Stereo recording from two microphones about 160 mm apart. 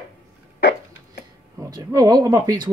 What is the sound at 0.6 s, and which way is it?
Hiccup, 90° left.